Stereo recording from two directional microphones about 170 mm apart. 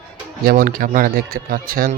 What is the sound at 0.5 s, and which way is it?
Speech, 55° right (ahead or behind).